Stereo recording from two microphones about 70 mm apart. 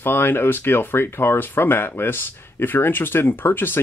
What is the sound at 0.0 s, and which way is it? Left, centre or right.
Speech, left.